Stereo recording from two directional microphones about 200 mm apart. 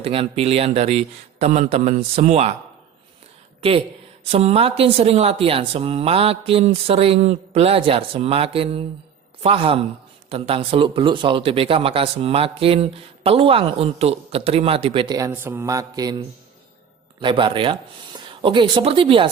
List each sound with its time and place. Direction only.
0.0 s a man's voice: 30° right (ahead or behind)
4.3 s a man's voice: 30° right (ahead or behind)
15.3 s mantra: 10° right (ahead or behind)
17.2 s a man's voice: 25° right (ahead or behind)